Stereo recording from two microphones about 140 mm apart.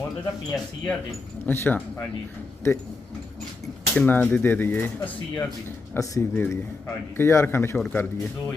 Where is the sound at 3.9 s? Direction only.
10° left (ahead or behind).